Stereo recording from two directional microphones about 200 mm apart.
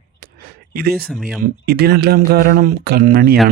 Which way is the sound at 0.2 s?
50° right (ahead or behind).